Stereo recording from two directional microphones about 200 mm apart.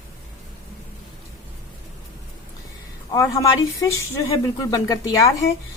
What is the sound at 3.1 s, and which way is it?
Speech, 15° left (ahead or behind).